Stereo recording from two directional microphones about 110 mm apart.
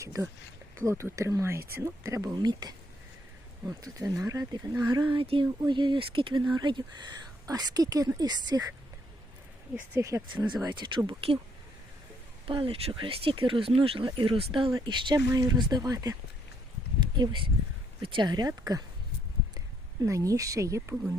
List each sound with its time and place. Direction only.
0.0 s speech: 30° right (ahead or behind)
3.9 s speech: 30° right (ahead or behind); by 5.5 s 55° right (ahead or behind)
5.6 s speech: 45° right (ahead or behind)
9.9 s speech: 25° right (ahead or behind)
10.6 s speech: 40° right (ahead or behind)
12.5 s speech: 55° right (ahead or behind); by 16.1 s 30° right (ahead or behind)
17.0 s a sound: 40° right (ahead or behind)
18.0 s speech: 45° right (ahead or behind)
20.1 s speech: 30° right (ahead or behind)